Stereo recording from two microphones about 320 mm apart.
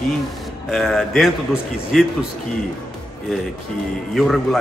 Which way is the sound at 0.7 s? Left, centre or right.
Centre.